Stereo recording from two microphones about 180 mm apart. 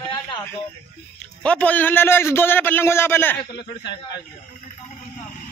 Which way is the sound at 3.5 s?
70° left (ahead or behind).